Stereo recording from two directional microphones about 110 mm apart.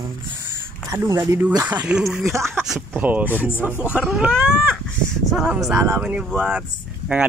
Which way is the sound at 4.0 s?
10° right (ahead or behind).